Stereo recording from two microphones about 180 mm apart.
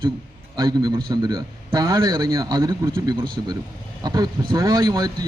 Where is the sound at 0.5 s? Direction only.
20° right (ahead or behind).